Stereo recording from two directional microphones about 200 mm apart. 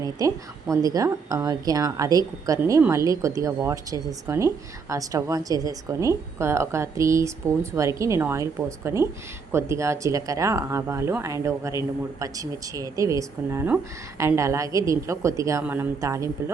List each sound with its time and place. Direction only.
0.0 s a woman's voice: 15° right (ahead or behind)